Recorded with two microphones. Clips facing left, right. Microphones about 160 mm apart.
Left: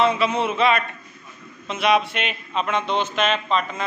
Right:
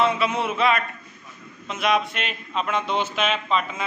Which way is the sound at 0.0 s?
Centre (ahead or behind).